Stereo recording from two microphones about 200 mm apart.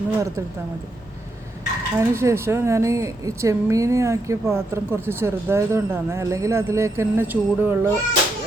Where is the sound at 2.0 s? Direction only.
15° right (ahead or behind).